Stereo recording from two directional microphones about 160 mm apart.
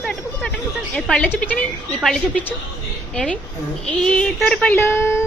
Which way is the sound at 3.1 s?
5° left (ahead or behind).